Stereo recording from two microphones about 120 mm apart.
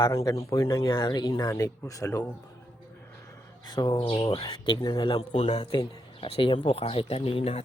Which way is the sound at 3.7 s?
35° left (ahead or behind).